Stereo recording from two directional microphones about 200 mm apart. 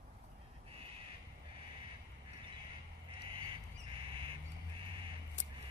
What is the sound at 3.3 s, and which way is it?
Bird, 25° right (ahead or behind).